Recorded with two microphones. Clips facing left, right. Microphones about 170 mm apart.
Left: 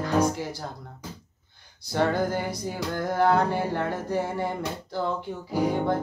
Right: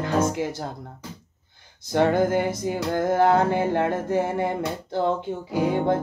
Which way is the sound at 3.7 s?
60° right (ahead or behind).